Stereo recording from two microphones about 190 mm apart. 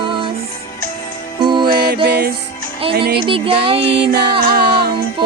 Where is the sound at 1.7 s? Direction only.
55° right (ahead or behind).